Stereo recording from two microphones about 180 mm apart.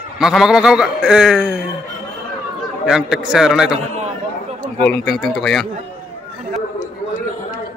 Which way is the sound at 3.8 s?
35° right (ahead or behind).